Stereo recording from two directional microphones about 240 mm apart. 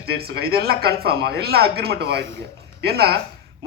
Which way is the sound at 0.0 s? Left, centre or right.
Right.